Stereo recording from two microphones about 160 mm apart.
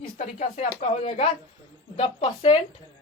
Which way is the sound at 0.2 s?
45° left (ahead or behind).